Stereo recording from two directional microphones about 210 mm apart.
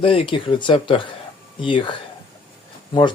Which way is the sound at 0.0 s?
25° left (ahead or behind).